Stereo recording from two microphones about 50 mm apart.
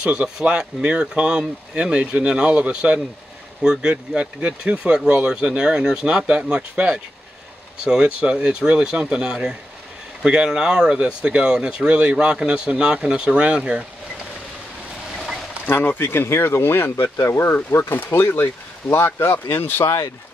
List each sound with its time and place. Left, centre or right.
0.0 s speech: right
15.6 s speech: left